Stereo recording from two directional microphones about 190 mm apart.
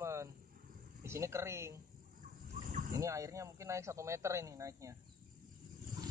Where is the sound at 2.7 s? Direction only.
45° right (ahead or behind).